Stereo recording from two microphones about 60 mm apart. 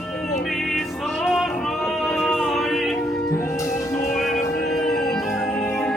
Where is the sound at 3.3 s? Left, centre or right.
Left.